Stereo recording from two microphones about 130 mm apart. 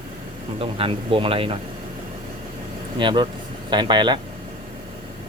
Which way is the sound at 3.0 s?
40° right (ahead or behind).